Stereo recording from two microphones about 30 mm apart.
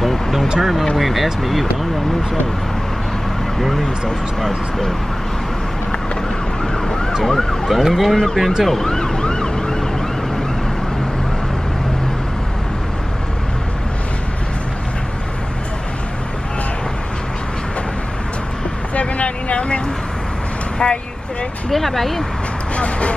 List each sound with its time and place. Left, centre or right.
0.0 s a sound: centre
0.6 s speech: centre
4.4 s speech: centre
6.6 s ambulance: left
7.2 s speech: centre
7.7 s speech: centre
8.6 s ambulance: centre
18.9 s vehicle: left
20.8 s speech: left
21.6 s speech: centre
22.8 s a sound: left